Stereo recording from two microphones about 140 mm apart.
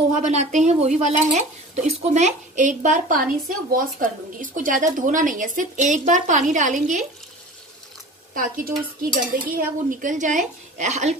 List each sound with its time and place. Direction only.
0.1 s a woman's voice: 55° right (ahead or behind)
8.4 s stir: 80° right
9.3 s a woman's voice: 85° right; by 11.1 s 55° right (ahead or behind)